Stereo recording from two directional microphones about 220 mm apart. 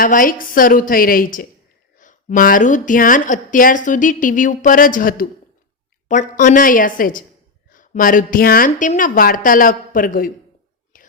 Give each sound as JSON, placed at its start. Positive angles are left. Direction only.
{"t": 0.0, "sound": "speech", "side_deg": 40}
{"t": 10.9, "sound": "whispering", "side_deg": 40}